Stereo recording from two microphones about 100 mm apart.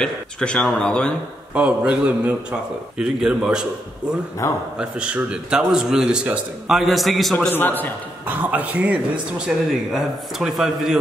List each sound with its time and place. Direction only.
0.0 s speech: 10° left (ahead or behind)
1.5 s a man's voice: 10° right (ahead or behind)
4.4 s a man's voice: 30° left (ahead or behind)
4.7 s a man's voice: 10° right (ahead or behind)
7.3 s a man's voice: 20° left (ahead or behind)
8.3 s a man's voice: 15° right (ahead or behind)
9.7 s a man's voice: 5° right (ahead or behind)